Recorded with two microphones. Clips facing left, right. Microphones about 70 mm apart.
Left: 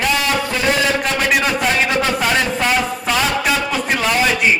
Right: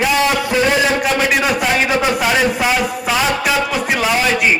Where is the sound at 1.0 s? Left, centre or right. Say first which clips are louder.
Right 2 dB; centre.